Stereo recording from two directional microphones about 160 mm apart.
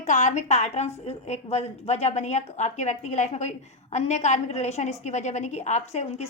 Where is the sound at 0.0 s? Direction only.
50° left (ahead or behind).